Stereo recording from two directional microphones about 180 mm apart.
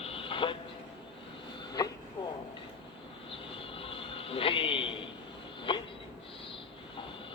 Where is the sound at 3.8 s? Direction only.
30° left (ahead or behind).